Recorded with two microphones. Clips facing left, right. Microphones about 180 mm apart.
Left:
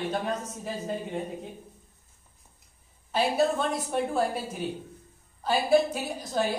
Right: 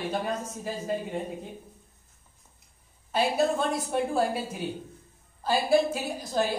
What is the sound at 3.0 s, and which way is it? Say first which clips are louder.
A woman's voice: even; centre (ahead or behind).